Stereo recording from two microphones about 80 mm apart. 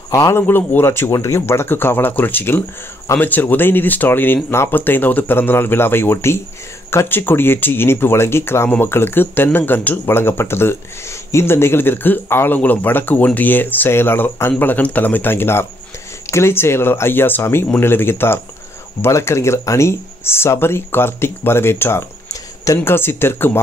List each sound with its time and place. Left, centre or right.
0.3 s speech: left